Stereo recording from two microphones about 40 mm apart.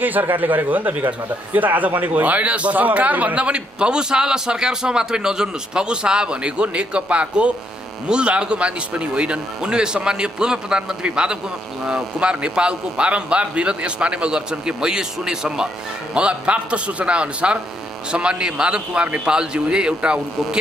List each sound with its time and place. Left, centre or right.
0.0 s a man's voice: right; by 15.7 s centre
16.2 s a man's voice: right